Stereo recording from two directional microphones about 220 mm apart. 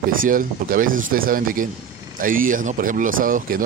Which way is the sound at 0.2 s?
40° right (ahead or behind).